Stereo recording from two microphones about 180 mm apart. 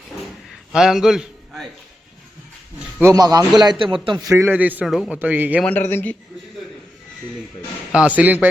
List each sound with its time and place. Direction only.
0.7 s a man's voice: 5° right (ahead or behind)
3.0 s a man's voice: 20° right (ahead or behind)
5.6 s speech: 10° left (ahead or behind)
7.9 s a man's voice: 10° right (ahead or behind)